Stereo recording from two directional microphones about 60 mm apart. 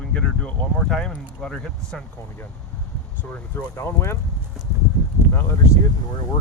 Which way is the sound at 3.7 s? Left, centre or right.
Left.